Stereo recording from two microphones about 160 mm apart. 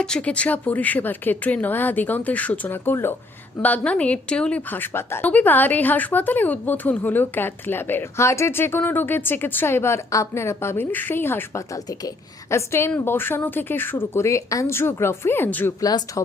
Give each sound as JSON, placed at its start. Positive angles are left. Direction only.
{"t": 0.0, "sound": "speech", "side_deg": 5}
{"t": 15.8, "sound": "speech", "side_deg": 25}